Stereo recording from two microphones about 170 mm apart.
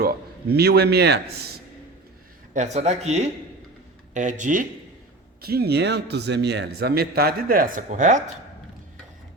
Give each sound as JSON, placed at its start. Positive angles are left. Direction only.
{"t": 0.0, "sound": "a man's voice", "side_deg": -70}
{"t": 2.5, "sound": "speech", "side_deg": -40}
{"t": 5.4, "sound": "a man's voice", "side_deg": -65}